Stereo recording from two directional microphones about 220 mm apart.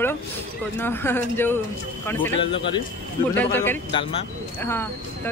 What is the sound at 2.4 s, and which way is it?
Speech, 25° left (ahead or behind).